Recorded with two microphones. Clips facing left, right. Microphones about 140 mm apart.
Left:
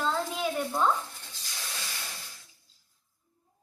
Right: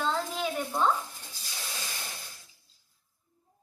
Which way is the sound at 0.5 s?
10° right (ahead or behind).